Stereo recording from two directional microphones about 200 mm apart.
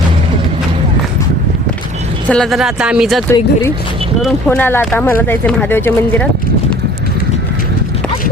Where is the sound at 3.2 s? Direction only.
15° left (ahead or behind).